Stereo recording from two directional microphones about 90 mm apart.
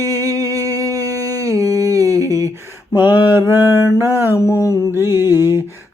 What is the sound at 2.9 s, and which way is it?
Mantra, 20° right (ahead or behind).